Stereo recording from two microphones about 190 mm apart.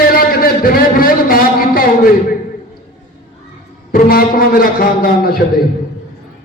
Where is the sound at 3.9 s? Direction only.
50° left (ahead or behind).